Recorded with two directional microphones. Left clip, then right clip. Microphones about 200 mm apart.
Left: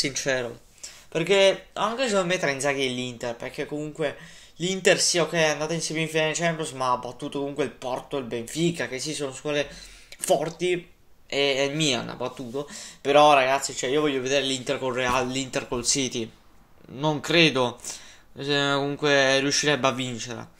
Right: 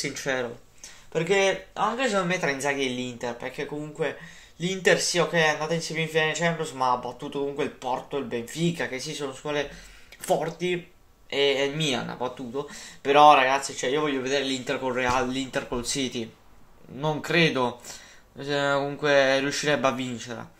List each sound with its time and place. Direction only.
0.0 s speech: 40° left (ahead or behind)